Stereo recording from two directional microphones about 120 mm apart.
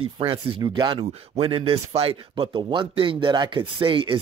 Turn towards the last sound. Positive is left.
turn(degrees=-45)  # may be behind; listen again after turning